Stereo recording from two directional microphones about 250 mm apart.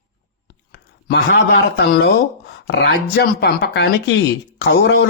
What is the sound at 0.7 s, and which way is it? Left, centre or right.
Speech, left.